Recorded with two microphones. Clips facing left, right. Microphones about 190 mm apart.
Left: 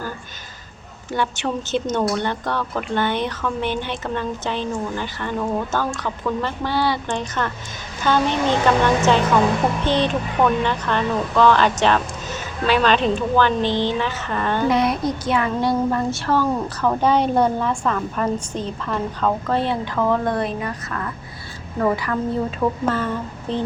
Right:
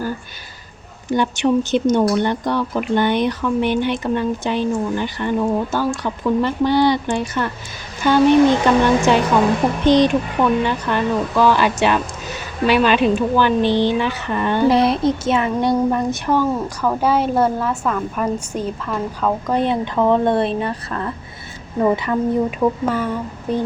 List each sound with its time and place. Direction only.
1.1 s speech: 15° right (ahead or behind)
14.7 s a woman's voice: 30° right (ahead or behind); by 19.5 s 5° right (ahead or behind)
19.5 s a woman's voice: 20° right (ahead or behind)